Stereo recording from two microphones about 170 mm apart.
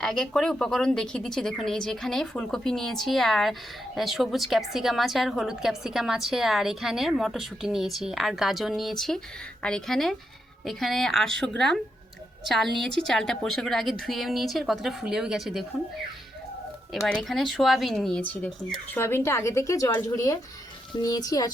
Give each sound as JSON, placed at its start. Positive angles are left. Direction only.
{"t": 0.0, "sound": "a woman's voice", "side_deg": 5}
{"t": 12.9, "sound": "a woman's voice", "side_deg": 0}
{"t": 17.1, "sound": "speech", "side_deg": 0}